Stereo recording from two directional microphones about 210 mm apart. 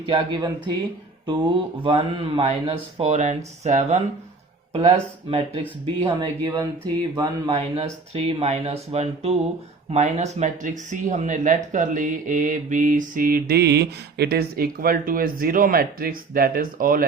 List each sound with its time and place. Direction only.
0.1 s speech: 20° right (ahead or behind); by 17.1 s 40° right (ahead or behind)